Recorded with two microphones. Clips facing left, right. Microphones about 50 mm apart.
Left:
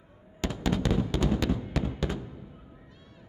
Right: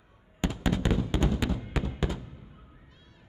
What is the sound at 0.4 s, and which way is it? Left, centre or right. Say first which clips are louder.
Fireworks: even; right.